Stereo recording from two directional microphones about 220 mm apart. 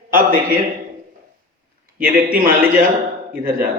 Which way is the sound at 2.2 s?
40° right (ahead or behind).